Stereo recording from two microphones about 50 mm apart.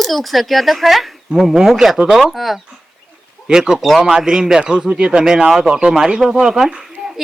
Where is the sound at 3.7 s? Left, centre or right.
Centre.